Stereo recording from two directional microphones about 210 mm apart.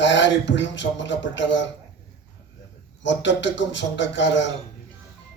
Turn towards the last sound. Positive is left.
turn(degrees=60)  # may be behind; listen again after turning